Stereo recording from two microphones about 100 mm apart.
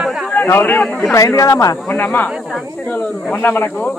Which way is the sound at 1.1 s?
35° left (ahead or behind).